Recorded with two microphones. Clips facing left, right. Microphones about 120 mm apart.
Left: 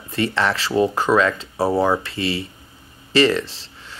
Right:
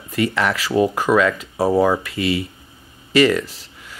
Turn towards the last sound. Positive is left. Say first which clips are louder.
# even
turn(degrees=30)  # may be behind; listen again after turning